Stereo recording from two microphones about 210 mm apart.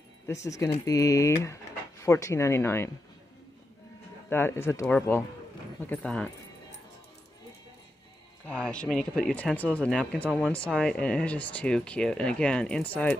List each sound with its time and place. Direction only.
0.3 s speech: 15° left (ahead or behind)
4.3 s speech: 10° left (ahead or behind)
8.5 s speech: 5° left (ahead or behind)